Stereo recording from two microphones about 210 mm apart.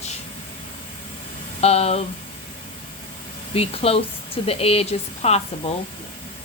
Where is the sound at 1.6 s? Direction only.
30° left (ahead or behind).